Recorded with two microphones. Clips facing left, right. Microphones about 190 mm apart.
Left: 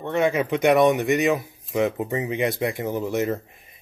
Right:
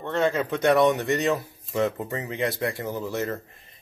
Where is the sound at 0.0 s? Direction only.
15° left (ahead or behind).